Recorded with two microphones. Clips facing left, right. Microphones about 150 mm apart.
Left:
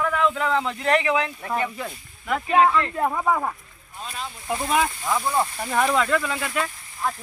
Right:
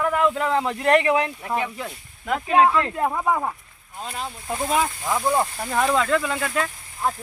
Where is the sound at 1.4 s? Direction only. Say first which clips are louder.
Even; 10° right (ahead or behind).